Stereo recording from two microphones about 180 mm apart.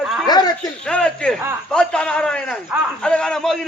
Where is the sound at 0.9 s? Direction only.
5° left (ahead or behind).